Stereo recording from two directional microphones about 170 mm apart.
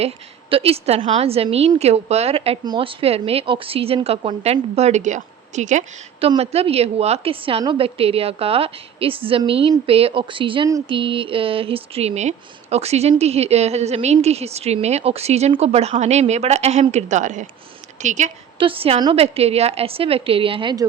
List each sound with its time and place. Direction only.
0.5 s a woman's voice: 35° right (ahead or behind)
18.6 s a woman's voice: 35° right (ahead or behind)